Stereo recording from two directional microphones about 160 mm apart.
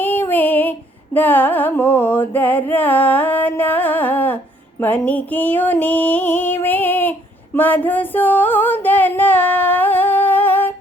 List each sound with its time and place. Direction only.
0.0 s music: 10° left (ahead or behind)